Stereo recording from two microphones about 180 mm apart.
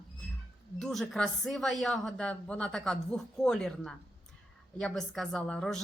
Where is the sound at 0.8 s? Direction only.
Centre (ahead or behind).